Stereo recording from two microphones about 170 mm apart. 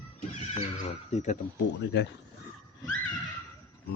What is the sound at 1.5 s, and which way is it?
Speech, 90° left.